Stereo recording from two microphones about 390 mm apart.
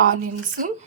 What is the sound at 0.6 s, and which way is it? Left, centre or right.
Speech, right.